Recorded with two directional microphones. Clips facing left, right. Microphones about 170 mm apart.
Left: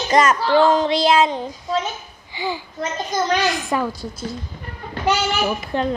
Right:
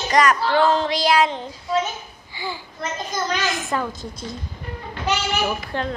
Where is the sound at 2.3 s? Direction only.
15° left (ahead or behind).